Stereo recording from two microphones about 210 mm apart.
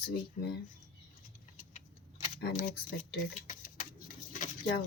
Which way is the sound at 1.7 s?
40° left (ahead or behind).